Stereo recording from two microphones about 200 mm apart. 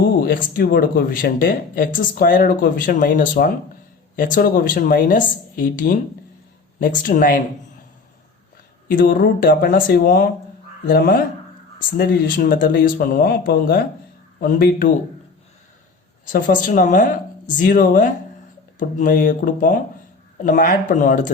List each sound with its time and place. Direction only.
0.2 s speech: 45° left (ahead or behind)
8.9 s speech: 45° left (ahead or behind)
16.2 s a woman's voice: 40° left (ahead or behind)